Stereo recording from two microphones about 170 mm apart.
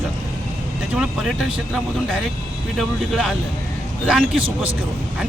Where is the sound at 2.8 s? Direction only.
Centre (ahead or behind).